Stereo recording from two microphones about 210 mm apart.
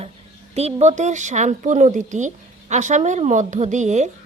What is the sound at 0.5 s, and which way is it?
A woman's voice, 30° right (ahead or behind).